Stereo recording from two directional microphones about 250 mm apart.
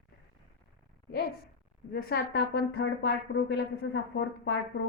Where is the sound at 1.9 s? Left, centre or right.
Left.